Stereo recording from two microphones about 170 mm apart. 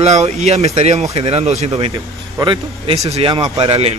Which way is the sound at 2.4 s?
30° right (ahead or behind).